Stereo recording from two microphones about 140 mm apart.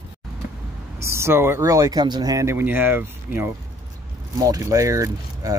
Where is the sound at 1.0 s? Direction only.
20° right (ahead or behind).